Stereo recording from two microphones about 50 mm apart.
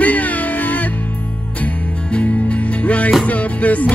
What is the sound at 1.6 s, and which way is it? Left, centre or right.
Music, left.